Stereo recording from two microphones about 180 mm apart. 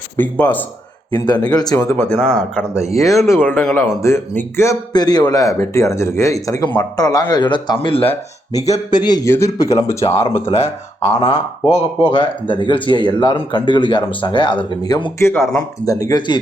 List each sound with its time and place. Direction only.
0.2 s a man's voice: 10° left (ahead or behind)
1.2 s a man's voice: 25° left (ahead or behind)
9.0 s a man's voice: 20° left (ahead or behind)
10.3 s speech: 35° left (ahead or behind)